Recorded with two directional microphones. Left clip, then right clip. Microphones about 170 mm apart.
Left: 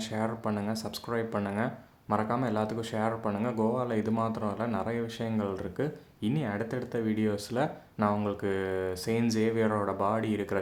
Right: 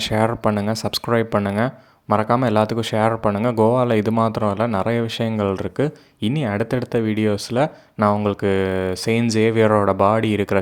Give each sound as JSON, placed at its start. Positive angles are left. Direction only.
{"t": 0.0, "sound": "speech", "side_deg": -50}